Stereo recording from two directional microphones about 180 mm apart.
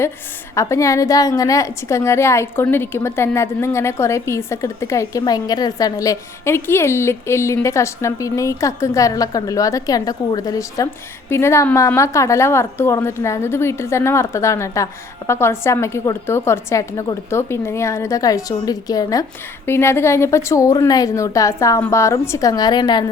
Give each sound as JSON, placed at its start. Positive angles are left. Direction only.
{"t": 0.5, "sound": "a woman's voice", "side_deg": 15}